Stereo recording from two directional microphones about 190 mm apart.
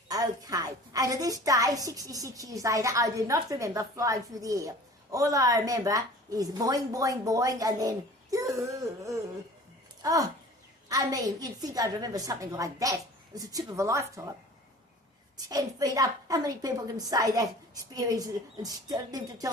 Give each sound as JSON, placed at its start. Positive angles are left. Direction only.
{"t": 0.1, "sound": "a woman's voice", "side_deg": -20}
{"t": 10.0, "sound": "a woman's voice", "side_deg": -20}
{"t": 15.4, "sound": "a woman's voice", "side_deg": -20}